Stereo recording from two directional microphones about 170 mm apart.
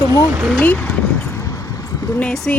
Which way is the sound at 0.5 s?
10° left (ahead or behind).